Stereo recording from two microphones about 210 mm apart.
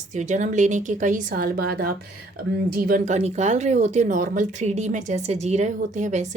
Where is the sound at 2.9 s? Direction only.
35° right (ahead or behind).